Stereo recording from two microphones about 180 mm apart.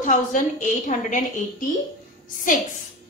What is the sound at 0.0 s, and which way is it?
Speech, 45° left (ahead or behind).